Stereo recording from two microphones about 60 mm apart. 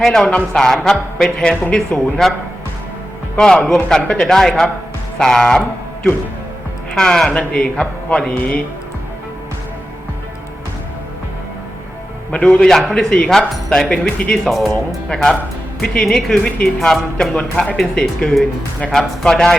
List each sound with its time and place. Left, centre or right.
0.0 s speech: centre
3.3 s speech: centre
5.2 s music: centre
6.9 s speech: centre
12.3 s a man's voice: centre
12.6 s speech: centre